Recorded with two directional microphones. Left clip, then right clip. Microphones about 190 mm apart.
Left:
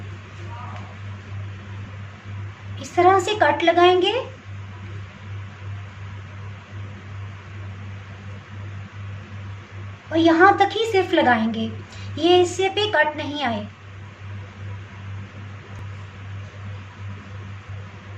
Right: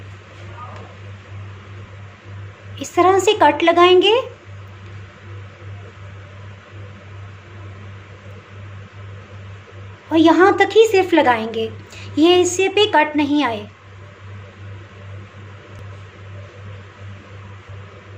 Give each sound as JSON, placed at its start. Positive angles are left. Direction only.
{"t": 2.7, "sound": "a woman's voice", "side_deg": -35}
{"t": 10.1, "sound": "a woman's voice", "side_deg": -35}